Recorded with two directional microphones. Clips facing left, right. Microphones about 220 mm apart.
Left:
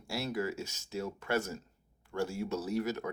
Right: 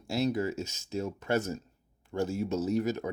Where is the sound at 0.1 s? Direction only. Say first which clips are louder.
Right 6 dB; 20° right (ahead or behind).